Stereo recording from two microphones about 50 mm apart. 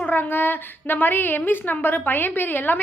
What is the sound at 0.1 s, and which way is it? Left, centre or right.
A woman's voice, left.